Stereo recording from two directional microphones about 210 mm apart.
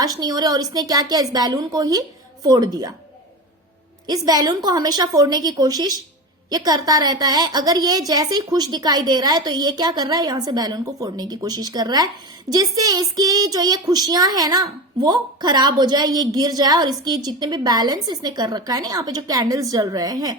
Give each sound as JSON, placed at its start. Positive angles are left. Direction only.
{"t": 0.0, "sound": "a woman's voice", "side_deg": -20}
{"t": 4.0, "sound": "a woman's voice", "side_deg": -20}